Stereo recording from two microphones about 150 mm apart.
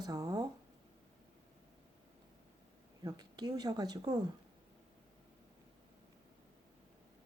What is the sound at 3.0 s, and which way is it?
Speech, 25° right (ahead or behind).